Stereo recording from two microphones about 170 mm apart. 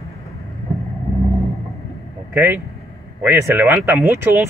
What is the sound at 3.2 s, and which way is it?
Speech, 10° right (ahead or behind).